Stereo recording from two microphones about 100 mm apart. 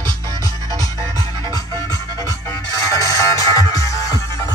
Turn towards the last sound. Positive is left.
turn(degrees=35)  # may be behind; listen again after turning